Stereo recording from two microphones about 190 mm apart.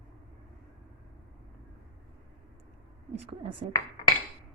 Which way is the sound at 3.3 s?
30° right (ahead or behind).